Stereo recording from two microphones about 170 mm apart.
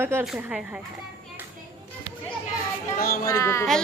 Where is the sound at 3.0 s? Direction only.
60° left (ahead or behind).